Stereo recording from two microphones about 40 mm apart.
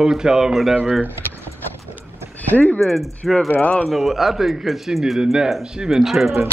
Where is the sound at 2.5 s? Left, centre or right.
Left.